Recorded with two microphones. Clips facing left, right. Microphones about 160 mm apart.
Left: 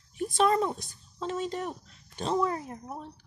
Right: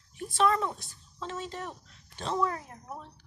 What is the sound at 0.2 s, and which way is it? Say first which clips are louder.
A woman's voice: left 2 dB; 20° left (ahead or behind).